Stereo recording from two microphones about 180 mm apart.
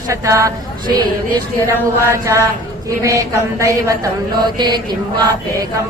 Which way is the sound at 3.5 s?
20° right (ahead or behind).